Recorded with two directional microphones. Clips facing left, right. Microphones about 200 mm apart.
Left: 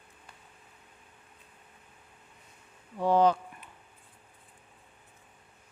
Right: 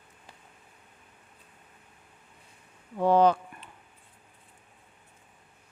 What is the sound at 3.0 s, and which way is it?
Speech, 60° right (ahead or behind).